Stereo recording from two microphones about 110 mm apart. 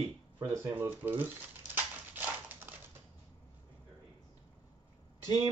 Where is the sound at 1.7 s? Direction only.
15° right (ahead or behind).